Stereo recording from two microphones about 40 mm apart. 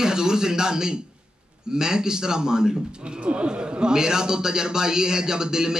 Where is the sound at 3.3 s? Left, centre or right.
Right.